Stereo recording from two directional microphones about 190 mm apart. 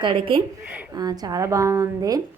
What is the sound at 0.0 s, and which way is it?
A woman's voice, 25° right (ahead or behind).